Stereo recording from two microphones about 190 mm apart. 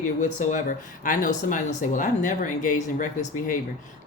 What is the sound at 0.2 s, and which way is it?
Speech, 40° left (ahead or behind).